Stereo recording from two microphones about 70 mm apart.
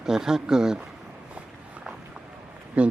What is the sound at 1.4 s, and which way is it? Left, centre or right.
Walk, centre.